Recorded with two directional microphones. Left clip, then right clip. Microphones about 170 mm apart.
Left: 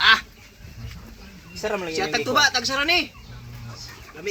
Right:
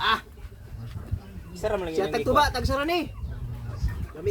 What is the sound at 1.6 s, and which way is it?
Speech, 20° left (ahead or behind).